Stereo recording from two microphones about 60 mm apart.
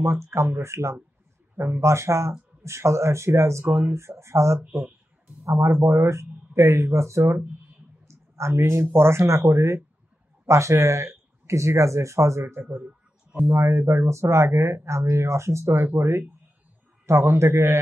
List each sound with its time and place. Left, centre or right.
0.0 s speech: right
8.1 s a sound: right
8.9 s speech: right